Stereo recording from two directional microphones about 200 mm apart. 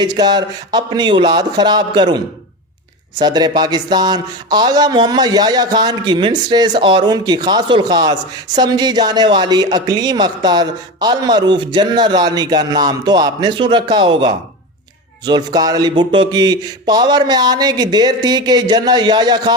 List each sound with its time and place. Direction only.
0.0 s speech: 20° right (ahead or behind)